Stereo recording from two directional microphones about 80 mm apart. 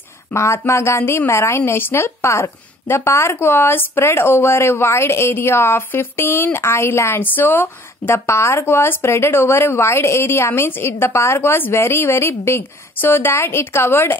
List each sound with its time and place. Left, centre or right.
0.3 s speech: left